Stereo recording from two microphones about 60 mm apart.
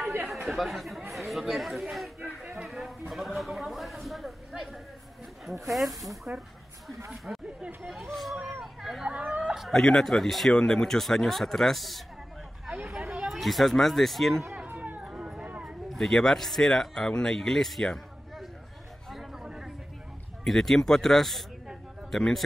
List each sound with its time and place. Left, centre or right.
0.5 s speech: centre
6.3 s speech: right
7.3 s chatter: centre
8.1 s speech: centre
8.4 s hubbub: centre
9.1 s a sound: centre
9.7 s speech: centre
13.2 s speech: centre
14.8 s a sound: right
15.6 s speech: centre
19.0 s chatter: centre
20.4 s speech: centre